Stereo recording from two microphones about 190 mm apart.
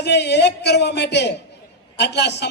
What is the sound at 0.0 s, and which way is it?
A man's voice, 65° left (ahead or behind).